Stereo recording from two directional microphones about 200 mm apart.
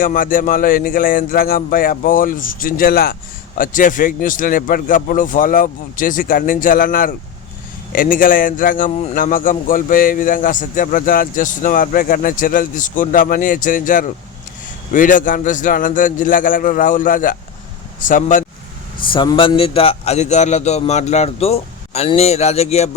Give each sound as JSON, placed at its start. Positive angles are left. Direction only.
{"t": 0.0, "sound": "a man's voice", "side_deg": 45}
{"t": 19.0, "sound": "a man's voice", "side_deg": 25}